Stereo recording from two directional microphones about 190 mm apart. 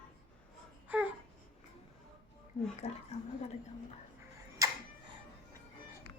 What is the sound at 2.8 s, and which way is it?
Speech, 30° left (ahead or behind).